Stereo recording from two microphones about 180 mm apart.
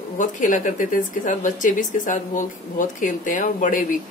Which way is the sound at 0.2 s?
45° left (ahead or behind).